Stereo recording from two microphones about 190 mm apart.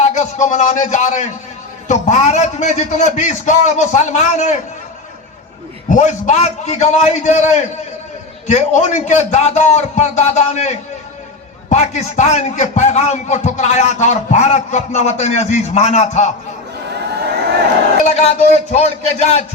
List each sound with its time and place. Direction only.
0.1 s a man's voice: 40° left (ahead or behind)
5.9 s a man's voice: 40° left (ahead or behind)
17.0 s a sound: 60° right (ahead or behind)
18.0 s a man's voice: 35° left (ahead or behind)